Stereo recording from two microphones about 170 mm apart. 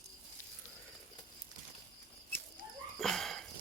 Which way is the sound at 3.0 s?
Centre (ahead or behind).